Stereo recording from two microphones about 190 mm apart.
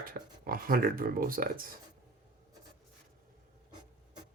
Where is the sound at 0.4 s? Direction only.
50° right (ahead or behind).